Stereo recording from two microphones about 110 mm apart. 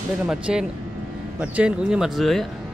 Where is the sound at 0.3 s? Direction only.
5° right (ahead or behind).